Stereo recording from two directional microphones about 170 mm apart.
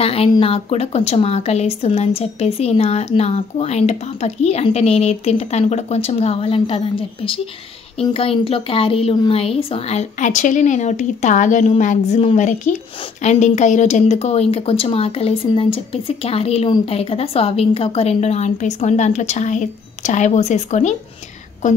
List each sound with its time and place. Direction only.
0.0 s a woman's voice: 35° left (ahead or behind)